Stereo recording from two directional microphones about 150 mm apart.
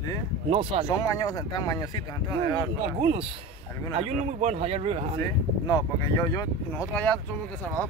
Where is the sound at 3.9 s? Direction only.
45° right (ahead or behind).